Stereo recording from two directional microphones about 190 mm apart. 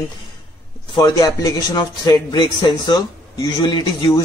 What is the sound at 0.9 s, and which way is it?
A man's voice, 20° left (ahead or behind).